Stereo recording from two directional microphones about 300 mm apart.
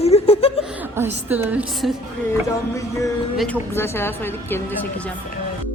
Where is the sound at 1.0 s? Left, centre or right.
Centre.